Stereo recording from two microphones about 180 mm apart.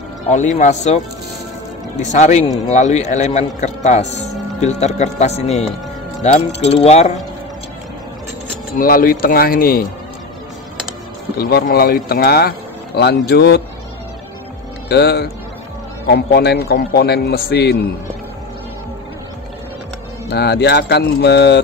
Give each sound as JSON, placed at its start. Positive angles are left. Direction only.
{"t": 0.3, "sound": "speech", "side_deg": 40}
{"t": 8.7, "sound": "speech", "side_deg": 55}
{"t": 11.3, "sound": "a man's voice", "side_deg": 55}
{"t": 14.9, "sound": "a man's voice", "side_deg": 65}
{"t": 20.2, "sound": "a man's voice", "side_deg": 65}